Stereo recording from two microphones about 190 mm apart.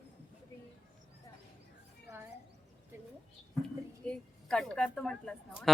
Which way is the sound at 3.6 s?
5° left (ahead or behind).